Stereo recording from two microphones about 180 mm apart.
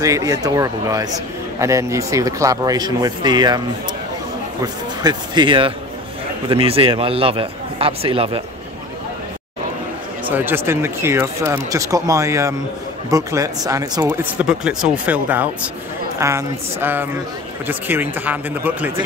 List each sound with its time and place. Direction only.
0.0 s a man's voice: 20° right (ahead or behind)
5.0 s a man's voice: 25° right (ahead or behind)
10.2 s speech: 10° right (ahead or behind)